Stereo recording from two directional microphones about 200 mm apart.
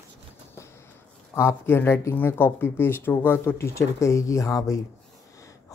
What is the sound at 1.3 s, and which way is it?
Speech, 10° left (ahead or behind).